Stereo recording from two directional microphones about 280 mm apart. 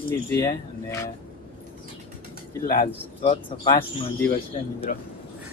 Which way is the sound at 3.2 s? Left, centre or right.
Centre.